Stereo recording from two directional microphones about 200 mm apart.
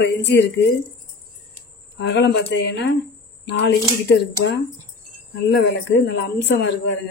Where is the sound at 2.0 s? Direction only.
60° left (ahead or behind).